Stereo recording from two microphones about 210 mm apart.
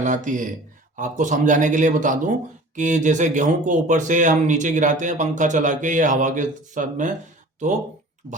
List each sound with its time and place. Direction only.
0.0 s speech: 35° right (ahead or behind)
8.2 s speech: 35° right (ahead or behind)